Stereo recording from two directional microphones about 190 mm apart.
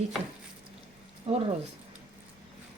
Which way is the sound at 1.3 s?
30° right (ahead or behind).